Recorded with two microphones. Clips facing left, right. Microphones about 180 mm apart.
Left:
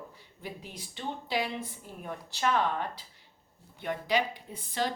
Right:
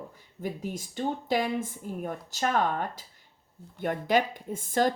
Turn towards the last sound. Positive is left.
turn(degrees=-45)  # may be behind; listen again after turning